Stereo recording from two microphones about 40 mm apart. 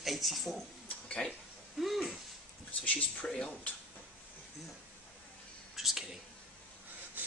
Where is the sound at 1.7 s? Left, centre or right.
Centre.